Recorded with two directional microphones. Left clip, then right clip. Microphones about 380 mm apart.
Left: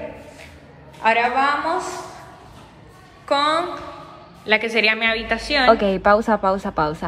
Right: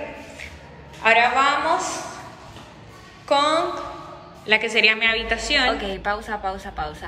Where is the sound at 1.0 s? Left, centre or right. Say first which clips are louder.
Right 1 dB; centre.